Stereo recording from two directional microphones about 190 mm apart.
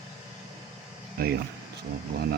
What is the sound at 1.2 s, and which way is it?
Speech, 50° right (ahead or behind).